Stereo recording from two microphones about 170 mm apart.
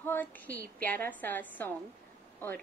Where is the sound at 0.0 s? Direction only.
10° left (ahead or behind).